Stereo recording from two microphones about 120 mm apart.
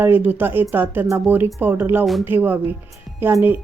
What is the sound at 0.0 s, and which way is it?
Speech, 15° right (ahead or behind).